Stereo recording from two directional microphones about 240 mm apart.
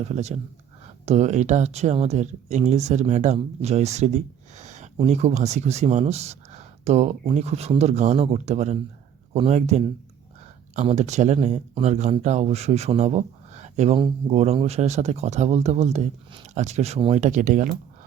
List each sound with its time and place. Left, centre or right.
0.0 s speech: right